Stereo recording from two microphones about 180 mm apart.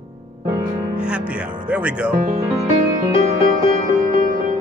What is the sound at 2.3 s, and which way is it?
Speech, 35° right (ahead or behind).